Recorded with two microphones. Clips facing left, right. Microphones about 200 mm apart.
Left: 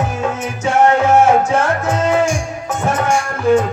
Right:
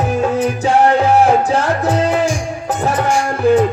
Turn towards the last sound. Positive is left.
turn(degrees=-35)  # may be behind; listen again after turning